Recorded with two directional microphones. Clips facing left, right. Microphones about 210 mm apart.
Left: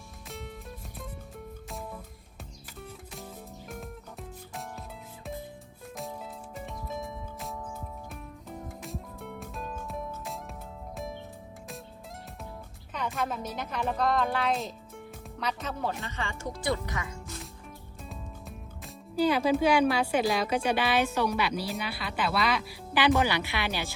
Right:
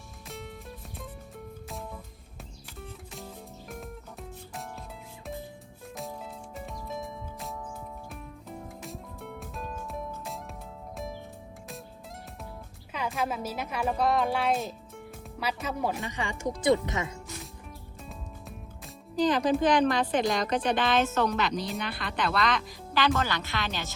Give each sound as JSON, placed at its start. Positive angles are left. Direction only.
{"t": 0.3, "sound": "music", "side_deg": 0}
{"t": 1.7, "sound": "music", "side_deg": 0}
{"t": 6.0, "sound": "music", "side_deg": 0}
{"t": 12.9, "sound": "speech", "side_deg": -5}
{"t": 19.1, "sound": "a woman's voice", "side_deg": 10}